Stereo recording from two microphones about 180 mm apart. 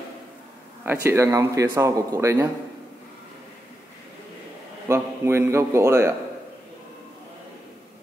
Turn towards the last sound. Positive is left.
turn(degrees=-15)  # may be behind; listen again after turning